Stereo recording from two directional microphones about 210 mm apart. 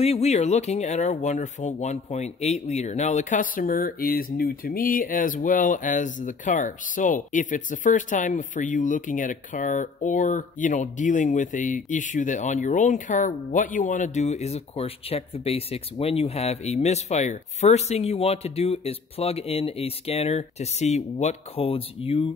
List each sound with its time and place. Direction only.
0.0 s speech: 30° left (ahead or behind)